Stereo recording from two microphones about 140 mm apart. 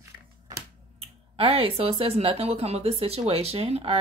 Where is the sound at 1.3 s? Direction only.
40° right (ahead or behind).